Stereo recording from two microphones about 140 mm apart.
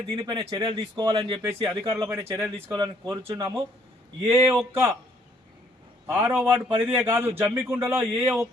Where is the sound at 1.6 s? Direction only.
20° right (ahead or behind).